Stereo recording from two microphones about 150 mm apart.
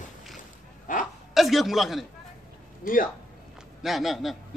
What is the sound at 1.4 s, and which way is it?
Speech, centre (ahead or behind).